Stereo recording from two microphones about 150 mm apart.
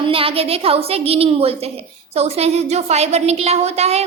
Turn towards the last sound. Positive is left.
turn(degrees=-45)  # may be behind; listen again after turning